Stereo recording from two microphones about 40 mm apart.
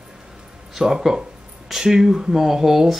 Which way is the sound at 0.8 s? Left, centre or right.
Centre.